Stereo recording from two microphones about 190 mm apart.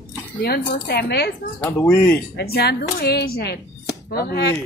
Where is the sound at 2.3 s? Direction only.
55° left (ahead or behind).